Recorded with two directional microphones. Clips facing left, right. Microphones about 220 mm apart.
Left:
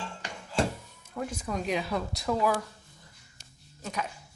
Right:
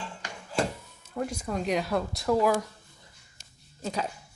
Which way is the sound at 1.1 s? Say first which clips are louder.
Right 2 dB; 10° right (ahead or behind).